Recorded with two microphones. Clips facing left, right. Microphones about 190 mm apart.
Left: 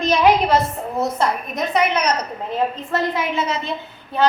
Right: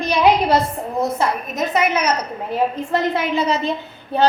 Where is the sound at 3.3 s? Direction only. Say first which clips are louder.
Right 4 dB; 35° right (ahead or behind).